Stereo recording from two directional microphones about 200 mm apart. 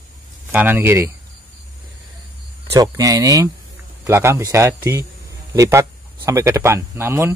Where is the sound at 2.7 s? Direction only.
15° right (ahead or behind).